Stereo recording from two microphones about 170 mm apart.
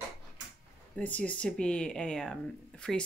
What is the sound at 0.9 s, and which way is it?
Speech, 10° left (ahead or behind).